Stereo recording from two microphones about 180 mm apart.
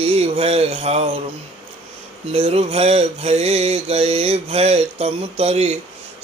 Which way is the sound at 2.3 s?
35° right (ahead or behind).